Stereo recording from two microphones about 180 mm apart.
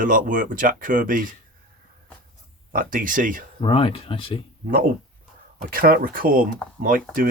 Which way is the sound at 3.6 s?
30° left (ahead or behind).